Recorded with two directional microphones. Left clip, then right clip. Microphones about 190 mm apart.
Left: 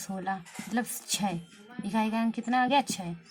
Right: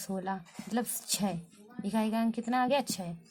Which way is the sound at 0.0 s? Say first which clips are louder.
Left 2 dB; 40° right (ahead or behind).